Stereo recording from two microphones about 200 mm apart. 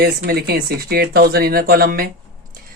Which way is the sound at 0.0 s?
50° right (ahead or behind).